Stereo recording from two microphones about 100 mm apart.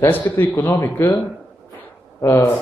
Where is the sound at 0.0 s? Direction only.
25° left (ahead or behind).